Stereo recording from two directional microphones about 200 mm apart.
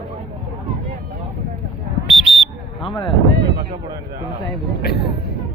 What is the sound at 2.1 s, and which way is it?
Fire alarm, 5° right (ahead or behind).